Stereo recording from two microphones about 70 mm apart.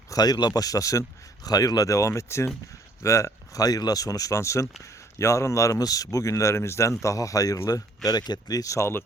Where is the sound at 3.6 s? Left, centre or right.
Left.